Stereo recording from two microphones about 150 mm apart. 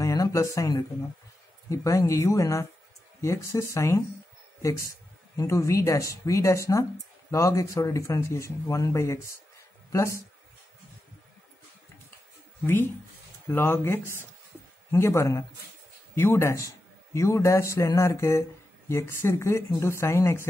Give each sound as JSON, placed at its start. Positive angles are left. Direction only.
{"t": 0.0, "sound": "a sound", "side_deg": 20}
{"t": 1.7, "sound": "speech", "side_deg": 20}
{"t": 5.4, "sound": "speech", "side_deg": 20}
{"t": 12.6, "sound": "speech", "side_deg": 15}